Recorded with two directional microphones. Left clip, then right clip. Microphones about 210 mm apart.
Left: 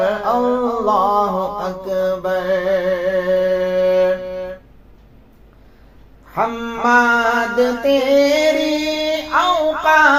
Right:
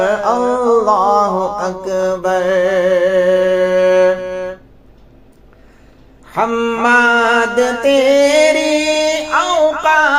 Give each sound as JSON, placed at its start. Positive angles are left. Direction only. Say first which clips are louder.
{"t": 0.0, "sound": "mantra", "louder": "right 3 dB", "side_deg": -30}
{"t": 6.3, "sound": "mantra", "louder": "right 5 dB", "side_deg": -30}